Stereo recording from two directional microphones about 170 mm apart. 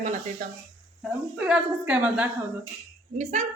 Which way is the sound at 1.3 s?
5° right (ahead or behind).